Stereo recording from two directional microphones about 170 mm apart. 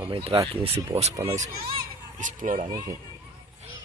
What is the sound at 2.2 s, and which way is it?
Speech, 50° right (ahead or behind).